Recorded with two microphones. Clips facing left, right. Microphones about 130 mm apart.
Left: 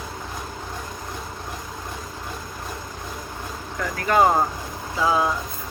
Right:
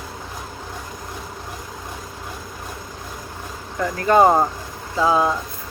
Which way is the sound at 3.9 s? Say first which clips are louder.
Right 4 dB; 25° right (ahead or behind).